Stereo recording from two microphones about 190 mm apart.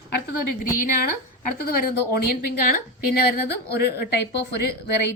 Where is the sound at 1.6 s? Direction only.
50° left (ahead or behind).